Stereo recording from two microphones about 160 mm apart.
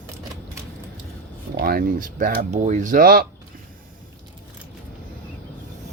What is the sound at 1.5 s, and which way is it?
Speech, 70° right (ahead or behind).